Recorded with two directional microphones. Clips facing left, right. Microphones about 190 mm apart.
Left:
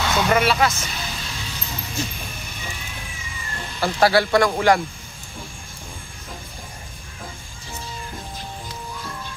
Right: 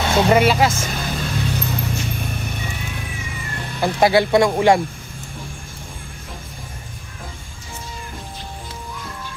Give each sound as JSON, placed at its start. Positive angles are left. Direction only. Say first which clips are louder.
{"t": 0.0, "sound": "speech", "louder": "right 4 dB", "side_deg": -30}
{"t": 0.7, "sound": "music", "louder": "right 7 dB", "side_deg": -50}
{"t": 3.8, "sound": "speech", "louder": "right 2 dB", "side_deg": -20}